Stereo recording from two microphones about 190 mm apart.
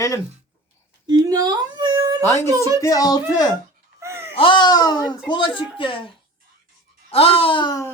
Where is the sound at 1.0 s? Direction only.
20° right (ahead or behind).